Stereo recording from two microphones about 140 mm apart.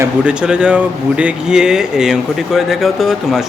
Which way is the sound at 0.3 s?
5° right (ahead or behind).